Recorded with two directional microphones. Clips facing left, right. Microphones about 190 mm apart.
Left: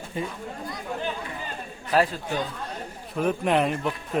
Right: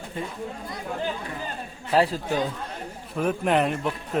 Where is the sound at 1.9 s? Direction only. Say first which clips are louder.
Right 1 dB; 30° right (ahead or behind).